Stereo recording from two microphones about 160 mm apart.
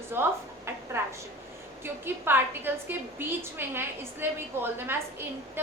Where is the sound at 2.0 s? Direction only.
15° right (ahead or behind).